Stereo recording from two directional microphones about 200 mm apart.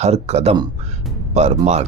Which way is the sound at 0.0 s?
30° right (ahead or behind).